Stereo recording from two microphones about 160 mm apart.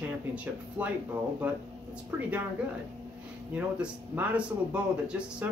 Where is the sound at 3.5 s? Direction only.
10° right (ahead or behind).